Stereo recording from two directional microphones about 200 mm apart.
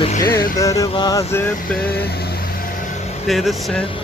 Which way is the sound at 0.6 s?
15° left (ahead or behind).